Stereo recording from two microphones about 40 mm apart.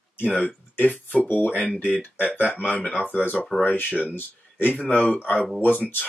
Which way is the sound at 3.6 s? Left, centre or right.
Left.